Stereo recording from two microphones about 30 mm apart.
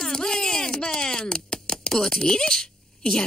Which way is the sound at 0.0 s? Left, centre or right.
Left.